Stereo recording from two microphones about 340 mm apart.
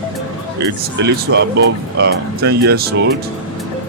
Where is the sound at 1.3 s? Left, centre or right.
Right.